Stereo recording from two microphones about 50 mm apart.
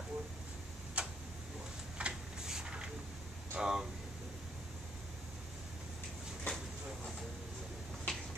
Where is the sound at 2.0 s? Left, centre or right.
Right.